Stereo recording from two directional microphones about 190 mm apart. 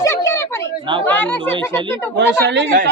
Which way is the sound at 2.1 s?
65° right (ahead or behind).